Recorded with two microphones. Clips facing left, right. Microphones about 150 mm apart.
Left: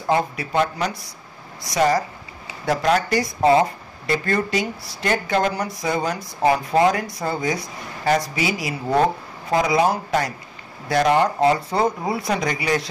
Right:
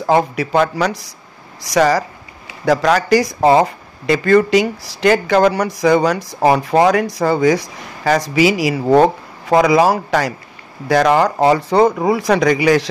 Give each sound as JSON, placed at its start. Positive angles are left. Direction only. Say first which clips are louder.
{"t": 0.0, "sound": "speech", "louder": "right 6 dB", "side_deg": -90}